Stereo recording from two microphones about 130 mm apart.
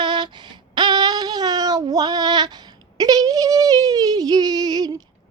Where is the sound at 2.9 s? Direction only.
30° right (ahead or behind).